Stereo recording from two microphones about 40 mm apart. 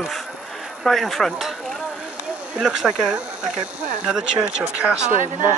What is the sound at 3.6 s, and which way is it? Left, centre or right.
Speech, right.